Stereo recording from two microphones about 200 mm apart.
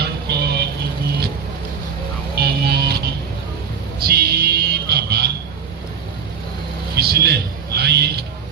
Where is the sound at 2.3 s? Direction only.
55° right (ahead or behind).